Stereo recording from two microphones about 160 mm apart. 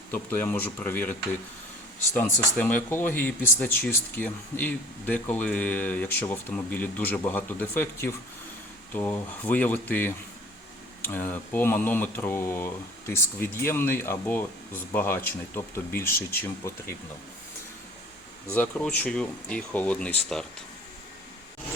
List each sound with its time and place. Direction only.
0.1 s speech: 15° left (ahead or behind)
2.1 s speech: 10° left (ahead or behind)
18.5 s speech: 10° left (ahead or behind)